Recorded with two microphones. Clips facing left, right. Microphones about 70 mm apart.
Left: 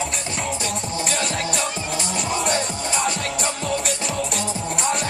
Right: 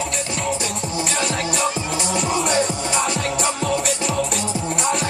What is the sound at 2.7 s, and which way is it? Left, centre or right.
Music, right.